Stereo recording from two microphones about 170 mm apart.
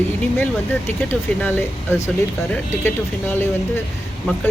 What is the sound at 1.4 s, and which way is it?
Speech, 10° left (ahead or behind).